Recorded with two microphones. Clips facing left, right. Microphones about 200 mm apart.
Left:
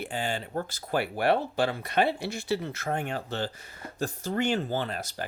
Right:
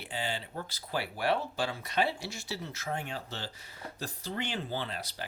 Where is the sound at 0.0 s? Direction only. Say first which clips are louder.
Left 5 dB; 50° left (ahead or behind).